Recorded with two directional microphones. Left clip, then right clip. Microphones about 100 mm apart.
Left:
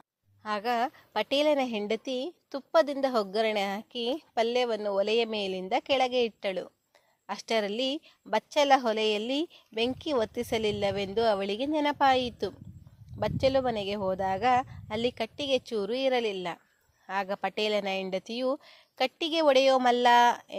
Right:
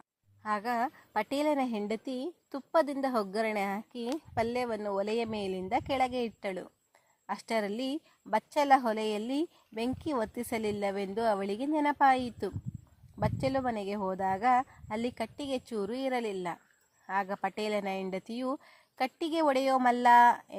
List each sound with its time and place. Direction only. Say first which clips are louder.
0.4 s a woman's voice: left 2 dB; 30° left (ahead or behind)